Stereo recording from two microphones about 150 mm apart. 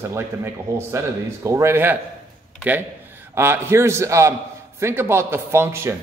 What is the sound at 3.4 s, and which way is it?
A man's voice, 15° right (ahead or behind).